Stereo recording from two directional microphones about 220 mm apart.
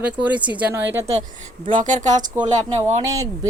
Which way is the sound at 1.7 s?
35° right (ahead or behind).